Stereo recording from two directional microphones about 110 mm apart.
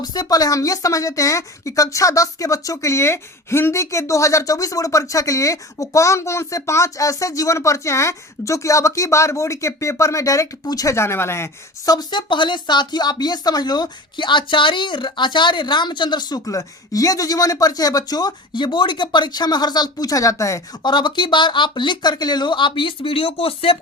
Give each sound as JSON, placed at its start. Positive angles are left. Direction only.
{"t": 0.0, "sound": "a woman's voice", "side_deg": 35}
{"t": 11.9, "sound": "speech", "side_deg": 45}
{"t": 20.8, "sound": "speech", "side_deg": 45}